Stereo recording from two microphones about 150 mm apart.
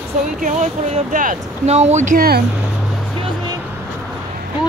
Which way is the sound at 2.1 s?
90° right.